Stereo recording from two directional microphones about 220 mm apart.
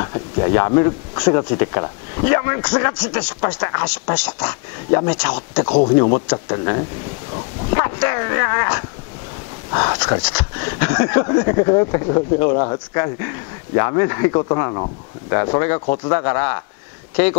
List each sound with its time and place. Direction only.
0.0 s speech: 20° left (ahead or behind)
3.0 s speech: 10° left (ahead or behind)
5.5 s speech: 25° left (ahead or behind)
10.8 s speech: 10° left (ahead or behind)
12.5 s speech: 30° left (ahead or behind)
12.9 s speech: 15° left (ahead or behind)